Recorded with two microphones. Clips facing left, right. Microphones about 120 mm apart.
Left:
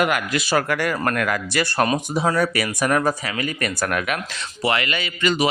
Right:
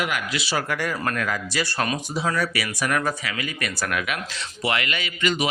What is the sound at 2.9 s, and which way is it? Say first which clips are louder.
Speech: left 4 dB; 35° left (ahead or behind).